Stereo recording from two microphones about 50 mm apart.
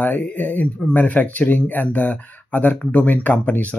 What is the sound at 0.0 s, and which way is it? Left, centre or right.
Speech, left.